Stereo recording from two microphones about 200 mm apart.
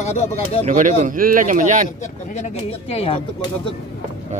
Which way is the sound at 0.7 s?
40° right (ahead or behind).